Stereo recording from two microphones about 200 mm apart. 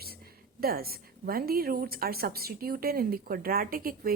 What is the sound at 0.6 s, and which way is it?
A woman's voice, 50° right (ahead or behind).